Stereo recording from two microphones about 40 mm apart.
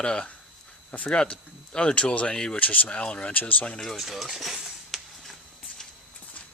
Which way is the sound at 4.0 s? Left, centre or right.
Centre.